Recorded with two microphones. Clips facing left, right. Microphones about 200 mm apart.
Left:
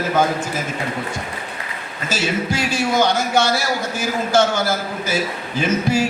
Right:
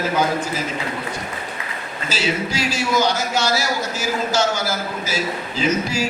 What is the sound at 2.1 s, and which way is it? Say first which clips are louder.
A man's voice: left 2 dB; 55° left (ahead or behind).